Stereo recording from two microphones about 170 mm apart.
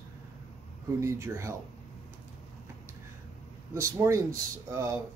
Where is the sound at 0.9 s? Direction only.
15° right (ahead or behind).